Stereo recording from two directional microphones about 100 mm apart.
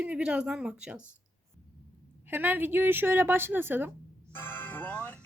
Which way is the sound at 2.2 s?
20° right (ahead or behind).